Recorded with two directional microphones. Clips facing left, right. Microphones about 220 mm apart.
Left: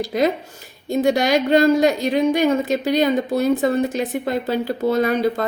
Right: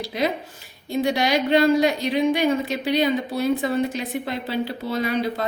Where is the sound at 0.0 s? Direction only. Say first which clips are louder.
Left 5 dB; 45° left (ahead or behind).